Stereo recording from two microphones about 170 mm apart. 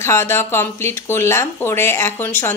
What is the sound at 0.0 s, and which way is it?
Speech, 15° left (ahead or behind).